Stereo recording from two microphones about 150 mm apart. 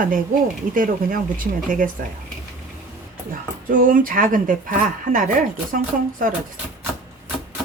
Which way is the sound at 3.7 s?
65° right (ahead or behind).